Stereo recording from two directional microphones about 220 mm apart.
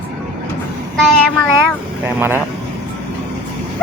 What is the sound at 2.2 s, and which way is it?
Speech, 10° right (ahead or behind).